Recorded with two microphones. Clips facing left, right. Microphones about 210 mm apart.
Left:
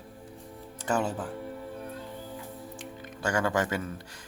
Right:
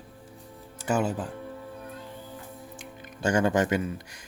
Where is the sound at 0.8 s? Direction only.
10° right (ahead or behind).